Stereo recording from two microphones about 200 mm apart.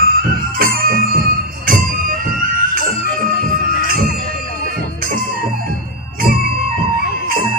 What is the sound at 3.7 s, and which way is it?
Music, 45° left (ahead or behind).